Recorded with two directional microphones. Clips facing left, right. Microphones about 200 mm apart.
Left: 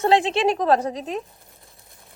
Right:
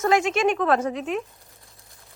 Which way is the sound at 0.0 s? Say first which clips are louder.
Left 2 dB; 30° left (ahead or behind).